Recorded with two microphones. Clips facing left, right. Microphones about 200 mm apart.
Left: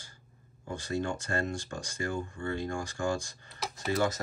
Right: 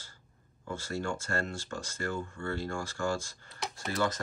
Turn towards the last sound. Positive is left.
turn(degrees=0)  # may be behind; listen again after turning